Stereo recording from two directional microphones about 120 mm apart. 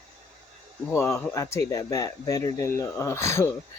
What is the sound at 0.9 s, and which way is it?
Speech, 20° left (ahead or behind).